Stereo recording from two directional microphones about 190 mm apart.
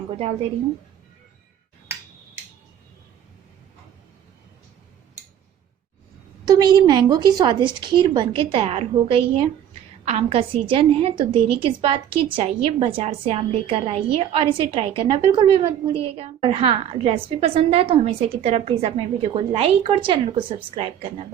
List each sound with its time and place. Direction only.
0.1 s a woman's voice: 30° right (ahead or behind)
6.4 s a woman's voice: 20° right (ahead or behind)